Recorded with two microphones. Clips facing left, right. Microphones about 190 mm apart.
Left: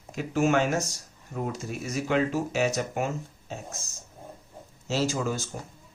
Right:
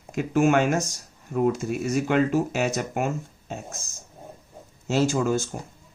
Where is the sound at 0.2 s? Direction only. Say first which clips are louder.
Right 4 dB; 55° right (ahead or behind).